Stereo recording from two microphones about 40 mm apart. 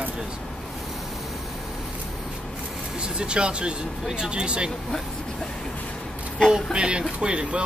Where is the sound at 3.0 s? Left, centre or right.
Right.